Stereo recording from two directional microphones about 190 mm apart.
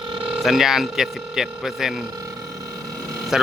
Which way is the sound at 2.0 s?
20° right (ahead or behind).